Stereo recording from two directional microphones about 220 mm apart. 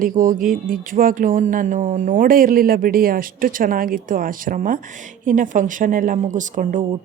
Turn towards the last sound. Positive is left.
turn(degrees=-35)  # may be behind; listen again after turning